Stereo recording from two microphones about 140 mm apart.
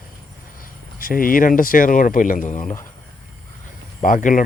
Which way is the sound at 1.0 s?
90° left.